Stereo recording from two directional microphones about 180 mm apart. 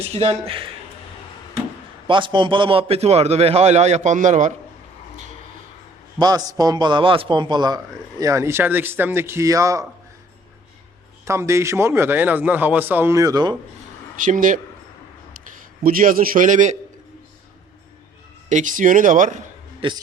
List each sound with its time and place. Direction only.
0.1 s a man's voice: 35° right (ahead or behind)
2.0 s a man's voice: 25° right (ahead or behind); by 4.5 s 45° right (ahead or behind)
6.1 s a man's voice: 20° right (ahead or behind)
11.3 s a man's voice: 15° right (ahead or behind)
14.3 s speech: 45° right (ahead or behind)
15.8 s speech: 50° right (ahead or behind)
18.4 s speech: 45° right (ahead or behind)
19.8 s speech: 30° right (ahead or behind)